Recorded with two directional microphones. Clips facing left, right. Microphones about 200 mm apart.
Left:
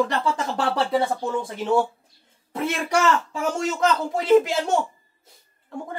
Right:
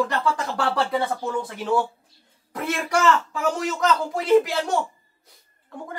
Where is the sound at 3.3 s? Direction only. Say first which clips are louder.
Even; 25° left (ahead or behind).